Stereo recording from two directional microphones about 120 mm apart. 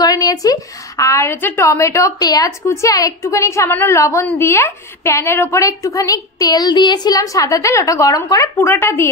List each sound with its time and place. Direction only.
0.0 s a woman's voice: 30° left (ahead or behind)